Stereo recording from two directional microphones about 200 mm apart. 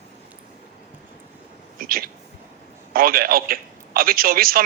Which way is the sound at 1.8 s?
45° right (ahead or behind).